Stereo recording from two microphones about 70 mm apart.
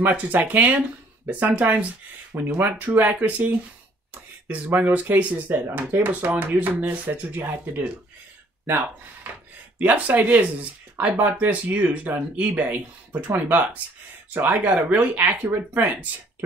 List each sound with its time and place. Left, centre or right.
0.0 s speech: right